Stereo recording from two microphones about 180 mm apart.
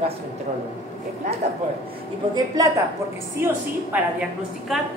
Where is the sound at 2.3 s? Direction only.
20° right (ahead or behind); by 4.9 s centre (ahead or behind).